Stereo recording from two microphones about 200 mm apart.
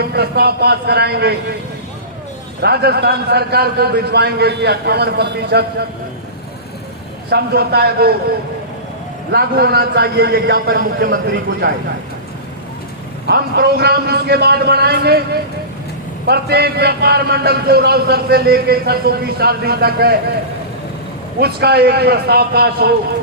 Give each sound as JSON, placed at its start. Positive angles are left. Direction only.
{"t": 0.0, "sound": "a man's voice", "side_deg": -50}
{"t": 2.6, "sound": "a man's voice", "side_deg": -55}
{"t": 7.3, "sound": "a man's voice", "side_deg": -55}
{"t": 9.3, "sound": "a man's voice", "side_deg": -55}
{"t": 13.2, "sound": "a man's voice", "side_deg": -55}
{"t": 21.3, "sound": "a man's voice", "side_deg": -50}